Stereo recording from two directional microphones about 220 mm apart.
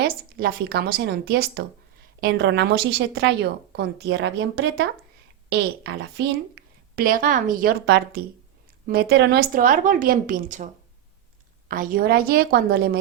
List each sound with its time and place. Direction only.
0.0 s a woman's voice: 45° right (ahead or behind)
11.7 s a woman's voice: 40° right (ahead or behind)